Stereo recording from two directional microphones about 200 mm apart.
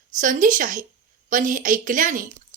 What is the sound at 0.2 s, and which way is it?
A woman's voice, 40° right (ahead or behind).